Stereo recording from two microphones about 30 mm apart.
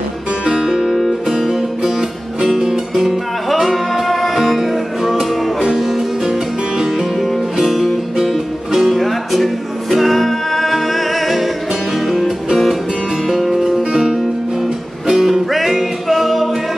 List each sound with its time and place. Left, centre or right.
0.5 s music: right
1.9 s music: centre
6.2 s music: centre
7.6 s music: centre
13.3 s music: centre